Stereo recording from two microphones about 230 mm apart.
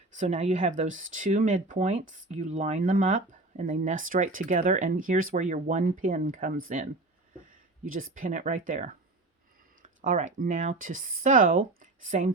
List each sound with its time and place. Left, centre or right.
0.2 s speech: right
7.9 s speech: right
10.0 s speech: right